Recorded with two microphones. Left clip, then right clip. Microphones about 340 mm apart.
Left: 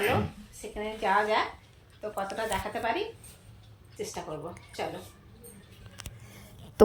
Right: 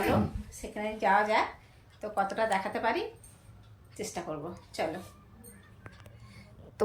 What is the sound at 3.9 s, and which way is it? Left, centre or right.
Speech, centre.